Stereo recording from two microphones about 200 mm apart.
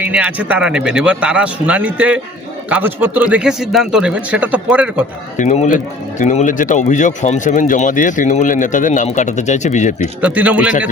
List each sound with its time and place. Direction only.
0.0 s speech: 5° right (ahead or behind)
5.4 s a man's voice: 35° left (ahead or behind)
10.2 s speech: 5° right (ahead or behind)